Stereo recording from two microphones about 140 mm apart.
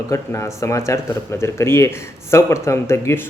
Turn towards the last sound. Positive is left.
turn(degrees=20)  # may be behind; listen again after turning